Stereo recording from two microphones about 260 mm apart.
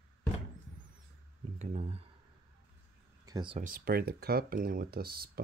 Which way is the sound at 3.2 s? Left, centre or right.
Centre.